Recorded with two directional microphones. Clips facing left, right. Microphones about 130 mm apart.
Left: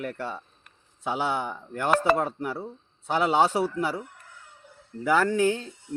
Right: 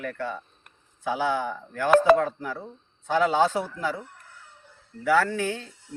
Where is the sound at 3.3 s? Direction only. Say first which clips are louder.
Left 1 dB; 15° left (ahead or behind).